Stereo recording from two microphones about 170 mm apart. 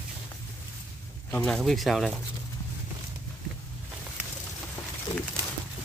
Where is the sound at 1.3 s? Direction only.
5° left (ahead or behind).